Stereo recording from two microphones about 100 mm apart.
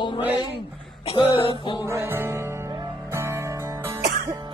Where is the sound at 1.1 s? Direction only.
60° left (ahead or behind).